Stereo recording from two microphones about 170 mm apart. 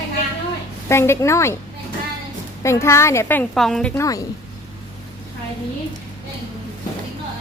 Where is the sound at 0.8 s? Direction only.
15° left (ahead or behind).